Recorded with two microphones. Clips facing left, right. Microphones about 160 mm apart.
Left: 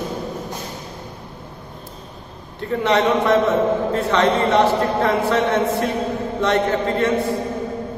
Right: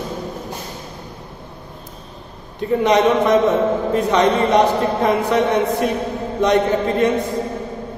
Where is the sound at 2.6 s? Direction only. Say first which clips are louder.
Right 3 dB; 15° right (ahead or behind).